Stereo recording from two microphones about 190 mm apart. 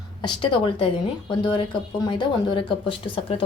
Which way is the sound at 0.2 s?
25° left (ahead or behind).